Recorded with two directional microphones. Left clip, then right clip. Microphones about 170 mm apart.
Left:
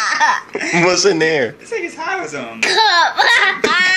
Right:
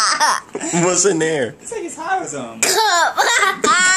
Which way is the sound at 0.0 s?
15° right (ahead or behind).